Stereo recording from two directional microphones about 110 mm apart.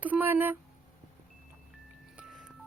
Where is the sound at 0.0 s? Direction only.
15° right (ahead or behind).